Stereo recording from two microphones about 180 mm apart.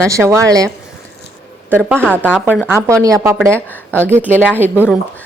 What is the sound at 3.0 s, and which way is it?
Speech, 15° right (ahead or behind).